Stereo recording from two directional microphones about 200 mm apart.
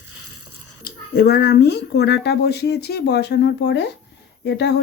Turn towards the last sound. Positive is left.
turn(degrees=55)  # may be behind; listen again after turning